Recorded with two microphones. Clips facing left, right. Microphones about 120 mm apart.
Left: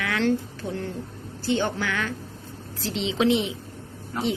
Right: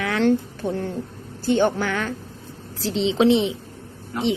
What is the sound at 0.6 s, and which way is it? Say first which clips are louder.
Speech: right 7 dB; 60° right (ahead or behind).